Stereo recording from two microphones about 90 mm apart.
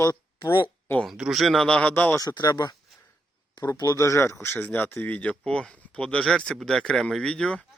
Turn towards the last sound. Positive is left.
turn(degrees=10)  # may be behind; listen again after turning